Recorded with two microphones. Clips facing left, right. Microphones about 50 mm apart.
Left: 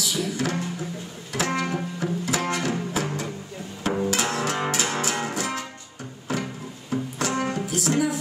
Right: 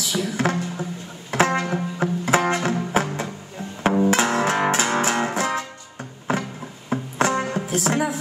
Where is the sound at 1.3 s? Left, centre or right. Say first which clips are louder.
Right 5 dB; right.